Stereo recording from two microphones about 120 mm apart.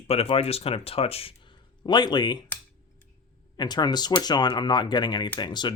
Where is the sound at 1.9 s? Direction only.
40° left (ahead or behind).